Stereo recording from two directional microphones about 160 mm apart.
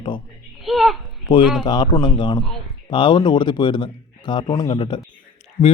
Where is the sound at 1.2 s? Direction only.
30° left (ahead or behind).